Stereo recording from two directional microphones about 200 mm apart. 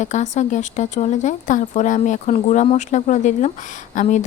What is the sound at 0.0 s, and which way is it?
Speech, 35° left (ahead or behind).